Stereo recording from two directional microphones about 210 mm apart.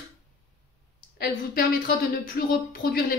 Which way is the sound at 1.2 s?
45° left (ahead or behind).